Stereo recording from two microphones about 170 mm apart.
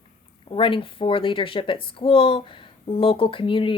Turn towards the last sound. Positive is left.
turn(degrees=30)  # may be behind; listen again after turning